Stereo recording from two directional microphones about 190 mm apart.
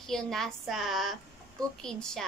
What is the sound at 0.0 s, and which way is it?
A woman's voice, centre (ahead or behind).